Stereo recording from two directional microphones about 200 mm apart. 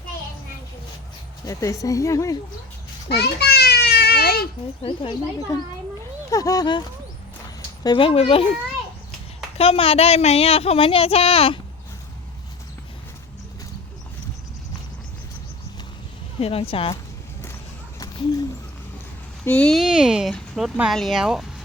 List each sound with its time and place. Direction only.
1.5 s speech: 15° left (ahead or behind)
3.1 s children playing: 55° left (ahead or behind)
4.8 s speech: 25° left (ahead or behind)
7.9 s speech: 25° left (ahead or behind)
9.6 s speech: 30° left (ahead or behind)
16.4 s speech: 30° left (ahead or behind)
19.5 s speech: 5° left (ahead or behind)